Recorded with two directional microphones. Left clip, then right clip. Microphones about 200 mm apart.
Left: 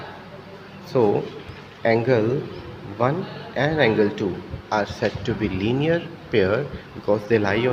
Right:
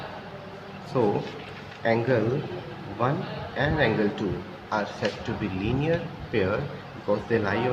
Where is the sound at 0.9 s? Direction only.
30° left (ahead or behind).